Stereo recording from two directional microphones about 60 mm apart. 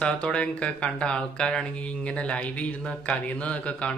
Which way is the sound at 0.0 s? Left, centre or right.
Centre.